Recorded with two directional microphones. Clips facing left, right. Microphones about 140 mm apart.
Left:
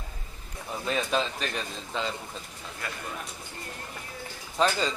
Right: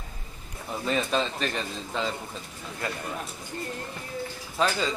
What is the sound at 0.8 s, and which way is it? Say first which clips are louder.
Speech: right 1 dB; centre (ahead or behind).